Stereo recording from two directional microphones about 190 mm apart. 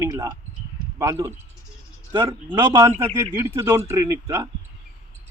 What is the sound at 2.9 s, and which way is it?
Speech, 35° right (ahead or behind).